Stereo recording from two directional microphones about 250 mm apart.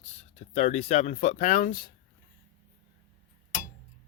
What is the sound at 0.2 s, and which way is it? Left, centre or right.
Speech, left.